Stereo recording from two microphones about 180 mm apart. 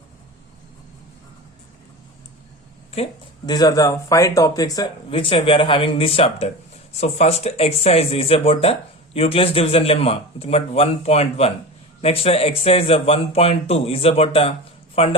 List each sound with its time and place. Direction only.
2.9 s speech: 35° left (ahead or behind)
3.4 s speech: 20° left (ahead or behind)